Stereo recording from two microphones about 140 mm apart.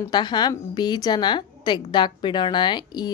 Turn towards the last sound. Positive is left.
turn(degrees=30)  # may be behind; listen again after turning